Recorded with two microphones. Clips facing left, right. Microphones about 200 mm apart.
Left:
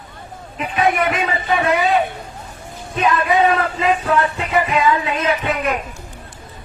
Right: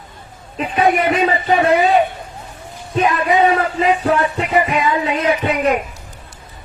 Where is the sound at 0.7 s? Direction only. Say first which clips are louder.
Right 3 dB; 35° right (ahead or behind).